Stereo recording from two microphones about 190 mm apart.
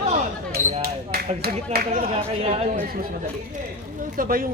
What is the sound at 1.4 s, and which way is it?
Speech, 50° right (ahead or behind).